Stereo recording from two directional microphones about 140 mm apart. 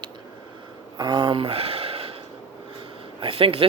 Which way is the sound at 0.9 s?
30° right (ahead or behind).